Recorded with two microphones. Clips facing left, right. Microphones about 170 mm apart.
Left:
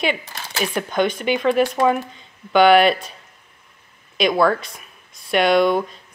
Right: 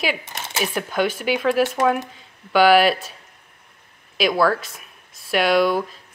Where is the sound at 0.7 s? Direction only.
5° right (ahead or behind).